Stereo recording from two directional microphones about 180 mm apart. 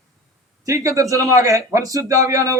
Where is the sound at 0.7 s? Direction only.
15° right (ahead or behind).